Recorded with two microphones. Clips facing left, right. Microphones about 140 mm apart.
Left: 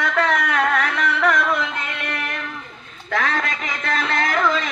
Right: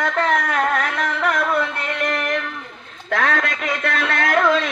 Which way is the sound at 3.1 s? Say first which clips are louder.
Right 2 dB; 60° right (ahead or behind).